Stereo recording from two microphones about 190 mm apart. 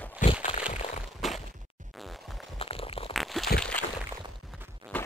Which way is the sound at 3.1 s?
Centre (ahead or behind).